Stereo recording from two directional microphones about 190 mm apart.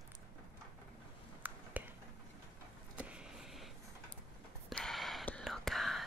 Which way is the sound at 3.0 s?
5° right (ahead or behind).